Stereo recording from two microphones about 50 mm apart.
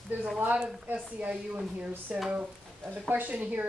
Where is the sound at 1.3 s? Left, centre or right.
Right.